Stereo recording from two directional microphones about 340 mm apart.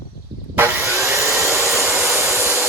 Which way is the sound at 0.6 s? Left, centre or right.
Centre.